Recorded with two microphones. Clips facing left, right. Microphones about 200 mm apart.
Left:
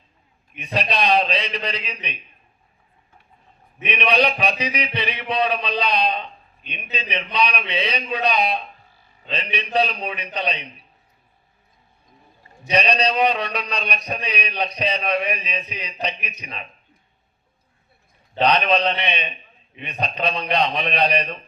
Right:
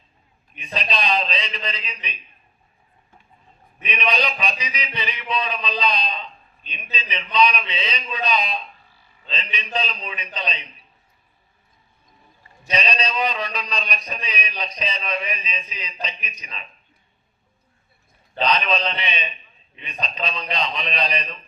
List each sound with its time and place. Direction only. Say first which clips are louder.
0.6 s a man's voice: left 4 dB; 60° left (ahead or behind)
3.8 s a man's voice: left 4 dB; 60° left (ahead or behind)
12.7 s a man's voice: left 5 dB; 60° left (ahead or behind)
18.3 s a man's voice: left 4 dB; 60° left (ahead or behind)